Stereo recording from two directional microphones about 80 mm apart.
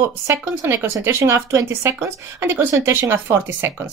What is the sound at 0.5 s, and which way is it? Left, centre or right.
A woman's voice, right.